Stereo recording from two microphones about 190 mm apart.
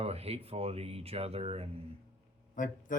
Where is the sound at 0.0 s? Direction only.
35° right (ahead or behind).